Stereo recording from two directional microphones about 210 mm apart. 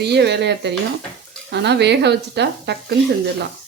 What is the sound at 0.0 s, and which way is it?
Speech, 50° right (ahead or behind).